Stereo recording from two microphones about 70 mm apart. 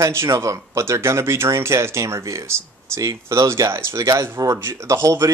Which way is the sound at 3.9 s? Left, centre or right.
Right.